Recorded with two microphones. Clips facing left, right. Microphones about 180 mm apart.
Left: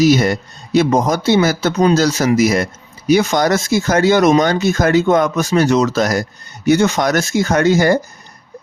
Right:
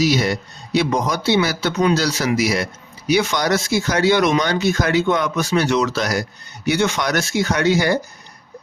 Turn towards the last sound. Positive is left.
turn(degrees=45)  # may be behind; listen again after turning